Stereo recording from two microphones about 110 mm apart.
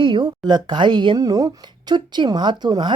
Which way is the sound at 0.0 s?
45° right (ahead or behind).